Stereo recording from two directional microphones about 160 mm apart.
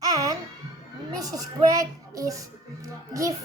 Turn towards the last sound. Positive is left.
turn(degrees=-20)  # may be behind; listen again after turning